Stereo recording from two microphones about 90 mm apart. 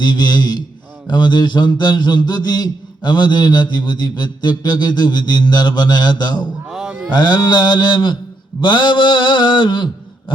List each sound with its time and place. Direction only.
0.0 s a man's voice: 55° left (ahead or behind)
6.7 s a sound: 10° right (ahead or behind)
7.1 s a man's voice: 55° left (ahead or behind)